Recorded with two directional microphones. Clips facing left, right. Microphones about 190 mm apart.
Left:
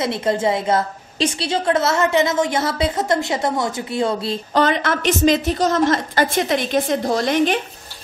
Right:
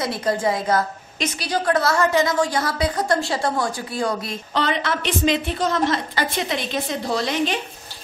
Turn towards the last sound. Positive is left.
turn(degrees=50)  # may be behind; listen again after turning